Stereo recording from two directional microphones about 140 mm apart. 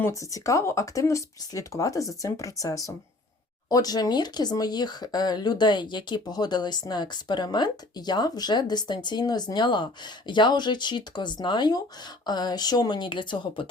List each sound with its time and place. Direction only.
0.0 s speech: 25° left (ahead or behind)